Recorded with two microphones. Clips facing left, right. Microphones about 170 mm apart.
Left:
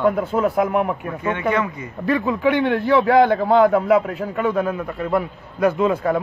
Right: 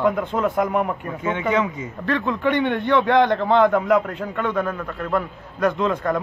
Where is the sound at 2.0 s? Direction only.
5° left (ahead or behind).